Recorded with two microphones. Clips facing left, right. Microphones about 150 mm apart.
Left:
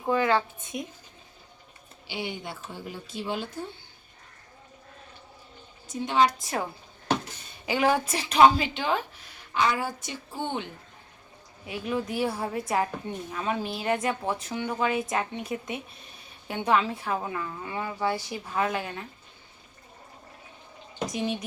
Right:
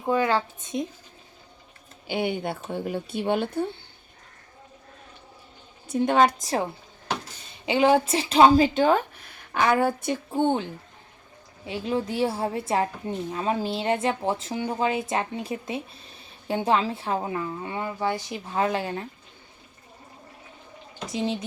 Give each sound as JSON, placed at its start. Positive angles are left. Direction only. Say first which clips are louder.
{"t": 0.1, "sound": "speech", "louder": "right 1 dB", "side_deg": -15}
{"t": 2.0, "sound": "speech", "louder": "right 8 dB", "side_deg": -55}
{"t": 5.9, "sound": "a woman's voice", "louder": "right 4 dB", "side_deg": -50}
{"t": 6.4, "sound": "speech", "louder": "right 4 dB", "side_deg": -30}
{"t": 9.5, "sound": "speech", "louder": "right 5 dB", "side_deg": -55}
{"t": 11.6, "sound": "speech", "louder": "right 3 dB", "side_deg": -25}
{"t": 21.1, "sound": "speech", "louder": "right 4 dB", "side_deg": -25}